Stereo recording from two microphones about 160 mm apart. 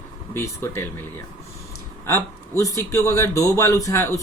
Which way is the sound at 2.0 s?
20° left (ahead or behind).